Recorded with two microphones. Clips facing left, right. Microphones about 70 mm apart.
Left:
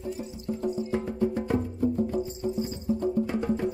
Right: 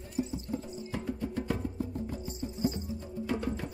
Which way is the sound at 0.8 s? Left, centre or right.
Left.